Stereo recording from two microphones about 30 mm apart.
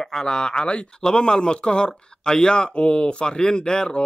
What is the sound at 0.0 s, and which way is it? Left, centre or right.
Speech, centre.